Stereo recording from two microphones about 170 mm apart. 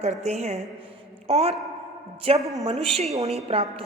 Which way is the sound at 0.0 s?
40° right (ahead or behind).